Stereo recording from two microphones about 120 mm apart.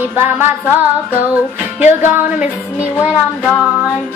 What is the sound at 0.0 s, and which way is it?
Music, 15° right (ahead or behind).